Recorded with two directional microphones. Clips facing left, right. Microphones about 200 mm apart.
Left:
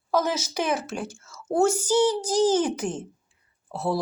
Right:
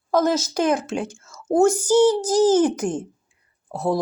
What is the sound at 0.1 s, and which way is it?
A woman's voice, 10° left (ahead or behind).